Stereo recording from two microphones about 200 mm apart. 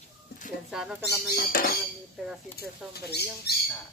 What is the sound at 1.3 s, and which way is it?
Speech, 50° left (ahead or behind).